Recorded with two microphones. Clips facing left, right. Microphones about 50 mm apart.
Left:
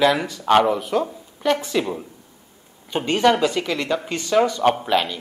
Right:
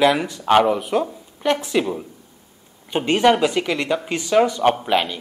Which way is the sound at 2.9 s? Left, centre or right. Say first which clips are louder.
Right 2 dB; centre.